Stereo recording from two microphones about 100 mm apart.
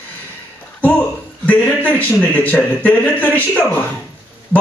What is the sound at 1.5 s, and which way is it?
A man's voice, 15° left (ahead or behind).